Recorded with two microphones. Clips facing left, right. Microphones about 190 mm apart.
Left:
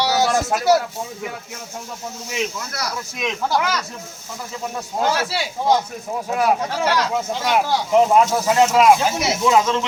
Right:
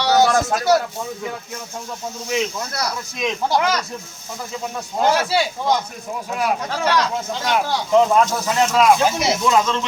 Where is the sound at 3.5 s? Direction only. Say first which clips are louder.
Right 3 dB; 15° right (ahead or behind).